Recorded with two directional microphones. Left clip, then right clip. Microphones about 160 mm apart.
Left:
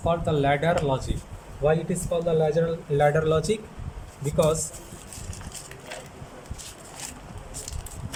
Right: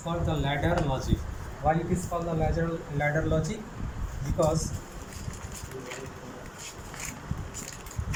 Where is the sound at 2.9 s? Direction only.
75° left (ahead or behind).